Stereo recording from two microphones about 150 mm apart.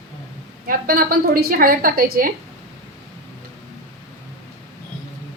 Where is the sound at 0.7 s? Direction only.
75° right (ahead or behind).